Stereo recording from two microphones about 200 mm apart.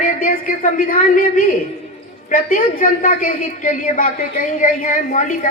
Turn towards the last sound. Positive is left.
turn(degrees=40)  # may be behind; listen again after turning